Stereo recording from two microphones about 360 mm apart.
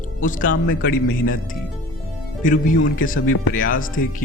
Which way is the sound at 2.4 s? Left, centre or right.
Left.